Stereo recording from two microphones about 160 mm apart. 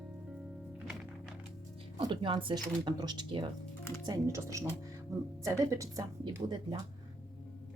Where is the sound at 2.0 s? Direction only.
30° right (ahead or behind).